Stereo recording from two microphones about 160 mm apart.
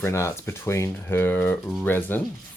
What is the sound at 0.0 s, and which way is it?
Speech, 15° left (ahead or behind).